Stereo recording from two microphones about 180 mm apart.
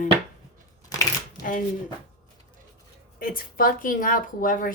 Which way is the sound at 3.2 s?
50° left (ahead or behind).